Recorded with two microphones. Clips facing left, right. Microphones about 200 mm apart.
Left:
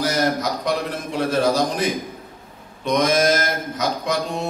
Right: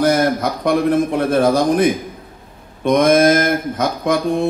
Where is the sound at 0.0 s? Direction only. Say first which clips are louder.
Right 6 dB; 55° right (ahead or behind).